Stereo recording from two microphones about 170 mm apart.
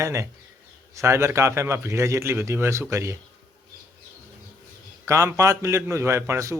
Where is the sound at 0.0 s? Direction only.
15° right (ahead or behind).